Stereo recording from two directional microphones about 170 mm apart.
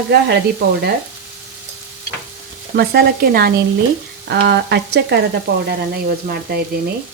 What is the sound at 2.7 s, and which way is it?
Speech, 70° right (ahead or behind).